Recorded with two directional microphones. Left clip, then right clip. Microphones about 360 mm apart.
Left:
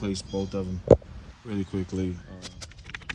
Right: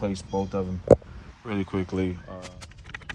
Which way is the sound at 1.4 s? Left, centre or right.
Centre.